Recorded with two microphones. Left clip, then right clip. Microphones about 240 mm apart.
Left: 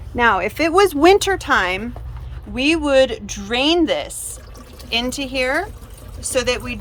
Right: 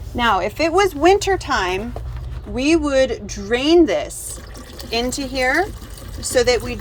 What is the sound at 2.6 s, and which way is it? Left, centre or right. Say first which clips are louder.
Speech: left 1 dB; centre.